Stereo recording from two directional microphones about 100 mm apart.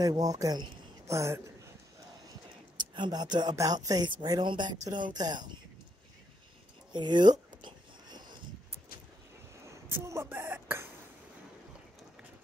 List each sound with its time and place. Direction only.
0.0 s speech: 35° right (ahead or behind)
2.9 s speech: 45° right (ahead or behind)
6.9 s a sound: 50° right (ahead or behind)
9.7 s speech: 30° right (ahead or behind)